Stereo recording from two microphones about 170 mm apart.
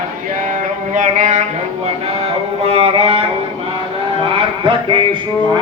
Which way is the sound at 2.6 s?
35° right (ahead or behind).